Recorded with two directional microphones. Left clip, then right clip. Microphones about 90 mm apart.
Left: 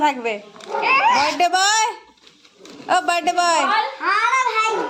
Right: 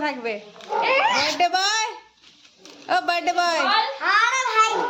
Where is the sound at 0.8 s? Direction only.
15° right (ahead or behind).